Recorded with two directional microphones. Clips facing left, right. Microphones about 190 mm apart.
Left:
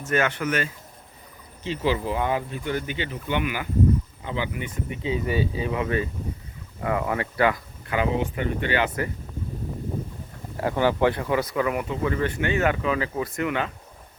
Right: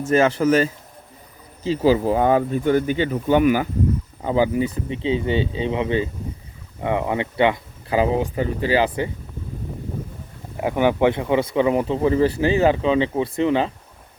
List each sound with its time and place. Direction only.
0.1 s speech: 35° right (ahead or behind)
10.6 s speech: 15° right (ahead or behind)